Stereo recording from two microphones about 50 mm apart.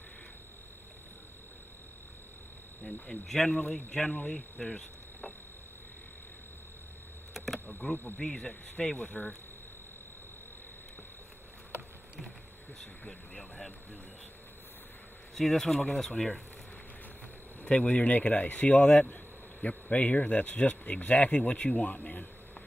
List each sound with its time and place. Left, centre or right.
3.3 s speech: centre
4.1 s speech: left
7.3 s a sound: centre
7.8 s speech: left
8.9 s speech: left
13.0 s speech: centre
15.3 s speech: centre
17.6 s speech: left